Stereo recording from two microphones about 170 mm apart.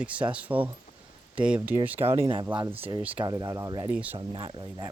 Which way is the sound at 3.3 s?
20° right (ahead or behind).